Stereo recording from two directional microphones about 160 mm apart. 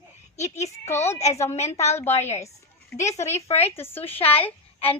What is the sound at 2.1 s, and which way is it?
A woman's voice, 45° left (ahead or behind).